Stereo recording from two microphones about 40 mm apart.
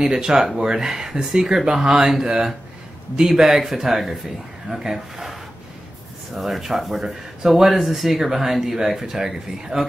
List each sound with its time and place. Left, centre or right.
0.0 s speech: centre